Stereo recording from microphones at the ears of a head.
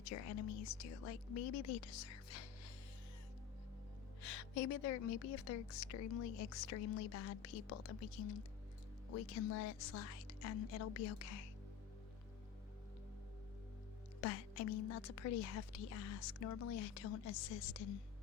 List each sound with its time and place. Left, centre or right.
0.0 s a woman's voice: left
4.2 s a woman's voice: left
14.2 s a woman's voice: left